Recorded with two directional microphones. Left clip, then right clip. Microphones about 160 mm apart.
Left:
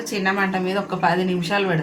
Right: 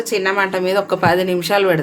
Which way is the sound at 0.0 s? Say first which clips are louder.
Right 5 dB; 90° right.